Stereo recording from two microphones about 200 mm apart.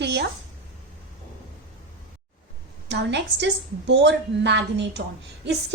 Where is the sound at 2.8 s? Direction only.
60° right (ahead or behind).